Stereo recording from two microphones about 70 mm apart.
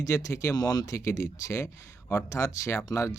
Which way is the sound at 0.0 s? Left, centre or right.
Left.